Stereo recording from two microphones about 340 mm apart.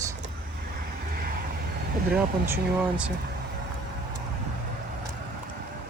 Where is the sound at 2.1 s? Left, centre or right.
Centre.